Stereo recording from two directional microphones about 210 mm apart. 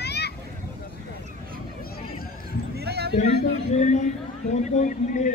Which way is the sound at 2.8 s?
50° right (ahead or behind).